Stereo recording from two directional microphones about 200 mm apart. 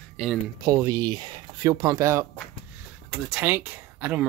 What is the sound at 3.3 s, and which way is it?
Speech, 10° right (ahead or behind).